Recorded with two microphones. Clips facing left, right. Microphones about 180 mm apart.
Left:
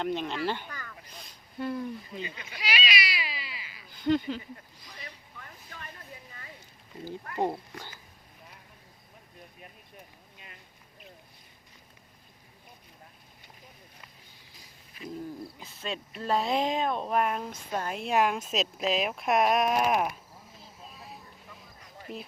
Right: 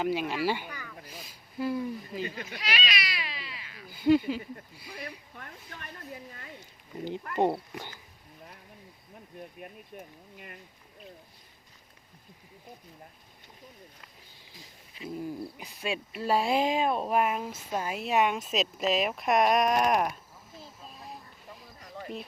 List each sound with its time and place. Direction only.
0.0 s speech: 5° right (ahead or behind)
2.2 s speech: 50° right (ahead or behind)
2.6 s cat: centre (ahead or behind)
3.8 s speech: 10° right (ahead or behind)
4.9 s a sound: 55° right (ahead or behind)
7.0 s speech: 20° right (ahead or behind)
10.3 s speech: 55° right (ahead or behind)
15.5 s speech: 15° right (ahead or behind); by 20.1 s centre (ahead or behind)